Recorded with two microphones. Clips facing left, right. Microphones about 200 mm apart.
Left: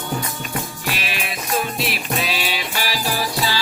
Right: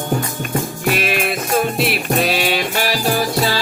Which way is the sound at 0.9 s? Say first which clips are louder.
Right 9 dB; 50° right (ahead or behind).